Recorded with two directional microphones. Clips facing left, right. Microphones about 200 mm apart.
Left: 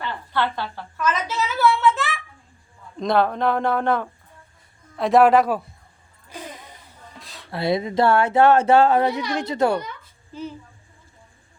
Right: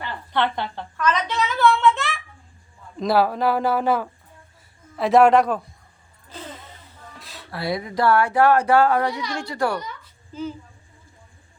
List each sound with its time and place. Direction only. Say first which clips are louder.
0.3 s a woman's voice: right 2 dB; 20° right (ahead or behind)
0.9 s a sound: right 1 dB; 5° left (ahead or behind)
3.0 s speech: even; 5° right (ahead or behind)
6.2 s vehicle: left 1 dB; 15° left (ahead or behind)
7.2 s a sound: even; centre (ahead or behind)
7.5 s speech: left 4 dB; 25° left (ahead or behind)